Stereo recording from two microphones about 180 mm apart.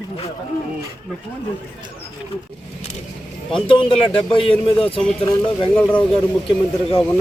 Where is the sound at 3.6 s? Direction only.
30° left (ahead or behind).